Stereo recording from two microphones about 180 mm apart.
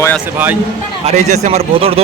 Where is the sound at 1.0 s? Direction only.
40° right (ahead or behind).